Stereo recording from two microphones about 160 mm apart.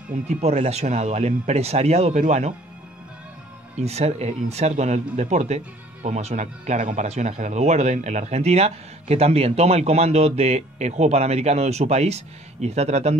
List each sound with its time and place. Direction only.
0.4 s speech: 40° right (ahead or behind)
3.8 s speech: 45° right (ahead or behind)